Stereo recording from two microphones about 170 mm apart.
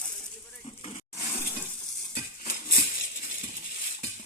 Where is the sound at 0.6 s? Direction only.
35° left (ahead or behind).